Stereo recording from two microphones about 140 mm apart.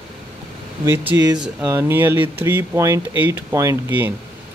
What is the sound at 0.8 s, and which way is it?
Speech, 15° right (ahead or behind).